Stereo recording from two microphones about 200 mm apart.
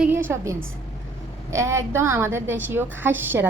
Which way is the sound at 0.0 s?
10° right (ahead or behind).